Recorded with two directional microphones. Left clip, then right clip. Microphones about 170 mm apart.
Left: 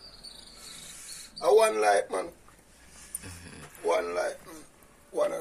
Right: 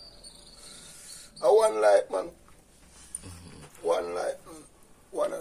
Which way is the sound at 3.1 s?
Centre (ahead or behind).